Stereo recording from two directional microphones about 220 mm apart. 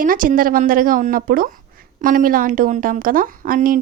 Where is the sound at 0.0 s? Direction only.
40° right (ahead or behind).